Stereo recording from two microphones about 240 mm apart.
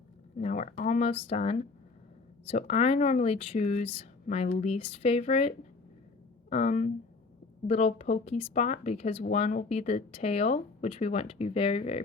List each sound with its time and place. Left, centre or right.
0.3 s speech: left